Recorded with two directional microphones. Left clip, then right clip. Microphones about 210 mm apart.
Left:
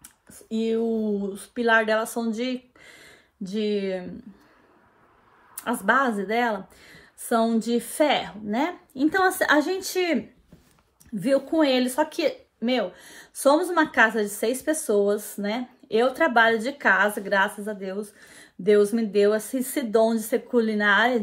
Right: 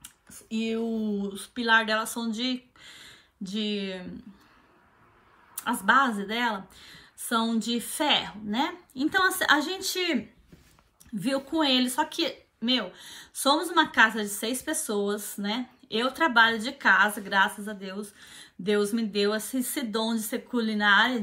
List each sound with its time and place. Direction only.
0.5 s speech: 25° right (ahead or behind)
5.9 s speech: 20° right (ahead or behind)
11.3 s speech: 20° right (ahead or behind)